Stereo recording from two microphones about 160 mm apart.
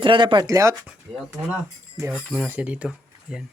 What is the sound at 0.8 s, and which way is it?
Speech, 5° right (ahead or behind).